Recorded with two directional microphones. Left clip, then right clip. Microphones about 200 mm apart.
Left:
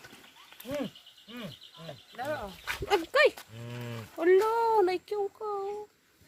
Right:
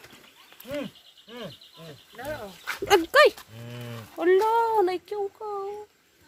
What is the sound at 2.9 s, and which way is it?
Dog, 35° right (ahead or behind).